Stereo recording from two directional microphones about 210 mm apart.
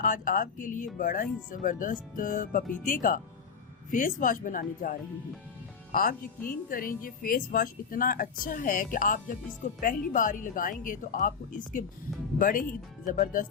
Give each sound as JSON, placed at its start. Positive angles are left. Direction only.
{"t": 0.0, "sound": "a woman's voice", "side_deg": 40}